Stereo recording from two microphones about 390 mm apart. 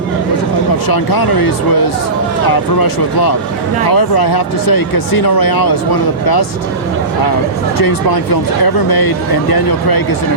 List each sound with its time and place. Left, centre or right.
0.9 s speech: left
2.5 s speech: left
7.8 s speech: left